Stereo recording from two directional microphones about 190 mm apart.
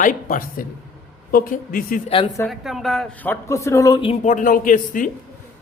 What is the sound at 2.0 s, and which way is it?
Speech, 30° left (ahead or behind).